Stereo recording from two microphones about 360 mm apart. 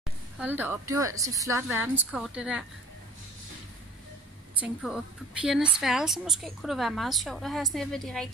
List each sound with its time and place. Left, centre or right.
0.4 s a woman's voice: centre
4.6 s a woman's voice: centre